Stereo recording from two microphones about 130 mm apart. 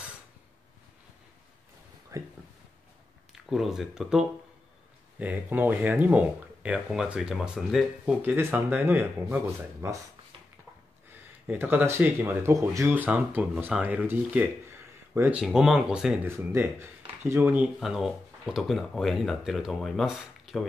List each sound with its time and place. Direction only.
2.1 s speech: 25° right (ahead or behind)
3.4 s speech: centre (ahead or behind)
8.4 s speech: 20° right (ahead or behind)
11.4 s speech: 15° right (ahead or behind)
15.4 s speech: 5° right (ahead or behind)
16.3 s speech: 20° right (ahead or behind)
17.7 s speech: 5° right (ahead or behind)